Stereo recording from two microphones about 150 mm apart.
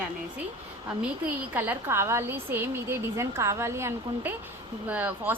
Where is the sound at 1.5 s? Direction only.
10° right (ahead or behind).